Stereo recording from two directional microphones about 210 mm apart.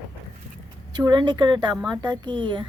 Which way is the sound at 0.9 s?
20° right (ahead or behind).